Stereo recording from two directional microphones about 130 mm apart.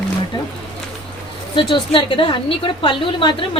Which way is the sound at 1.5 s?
40° left (ahead or behind).